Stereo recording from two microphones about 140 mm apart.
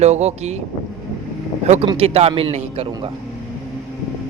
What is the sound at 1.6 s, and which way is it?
Speech, 50° right (ahead or behind).